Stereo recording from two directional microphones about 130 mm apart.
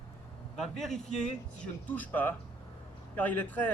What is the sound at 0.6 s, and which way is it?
A man's voice, 5° left (ahead or behind).